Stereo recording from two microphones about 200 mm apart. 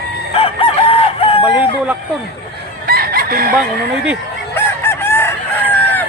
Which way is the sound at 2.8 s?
50° right (ahead or behind).